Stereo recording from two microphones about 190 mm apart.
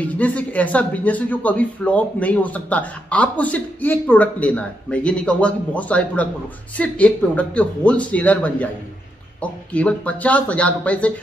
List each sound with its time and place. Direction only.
0.0 s speech: 5° left (ahead or behind)